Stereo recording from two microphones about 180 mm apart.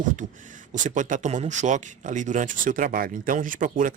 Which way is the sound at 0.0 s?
45° right (ahead or behind).